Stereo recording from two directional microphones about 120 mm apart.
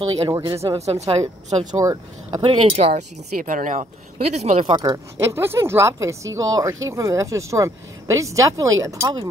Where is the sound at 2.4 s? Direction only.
50° right (ahead or behind); by 3.9 s 90° right.